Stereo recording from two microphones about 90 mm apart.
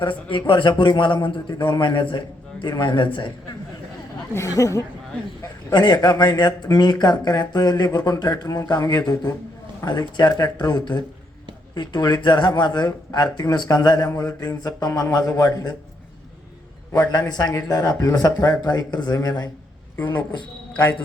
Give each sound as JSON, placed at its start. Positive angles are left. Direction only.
{"t": 0.0, "sound": "a man's voice", "side_deg": 65}
{"t": 4.4, "sound": "speech", "side_deg": 40}
{"t": 5.4, "sound": "speech", "side_deg": 50}
{"t": 16.9, "sound": "speech", "side_deg": 50}